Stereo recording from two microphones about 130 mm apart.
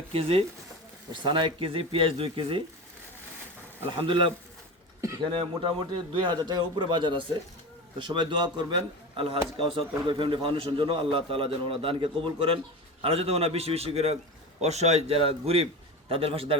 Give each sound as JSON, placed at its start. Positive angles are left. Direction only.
{"t": 0.1, "sound": "a man's voice", "side_deg": -45}
{"t": 4.0, "sound": "a man's voice", "side_deg": -40}